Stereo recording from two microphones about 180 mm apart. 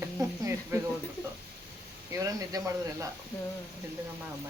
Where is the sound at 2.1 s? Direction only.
20° right (ahead or behind).